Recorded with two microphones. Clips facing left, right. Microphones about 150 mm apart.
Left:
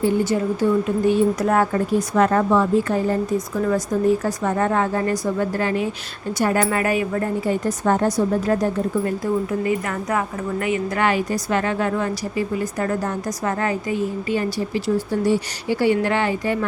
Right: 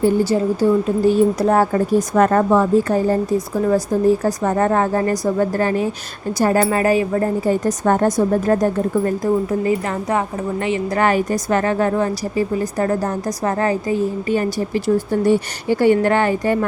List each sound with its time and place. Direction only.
0.0 s a woman's voice: 35° right (ahead or behind)
1.9 s a woman's voice: 45° right (ahead or behind)
7.6 s a woman's voice: 45° right (ahead or behind)